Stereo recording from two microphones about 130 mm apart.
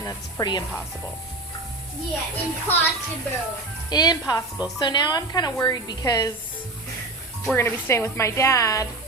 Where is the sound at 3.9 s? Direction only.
30° left (ahead or behind).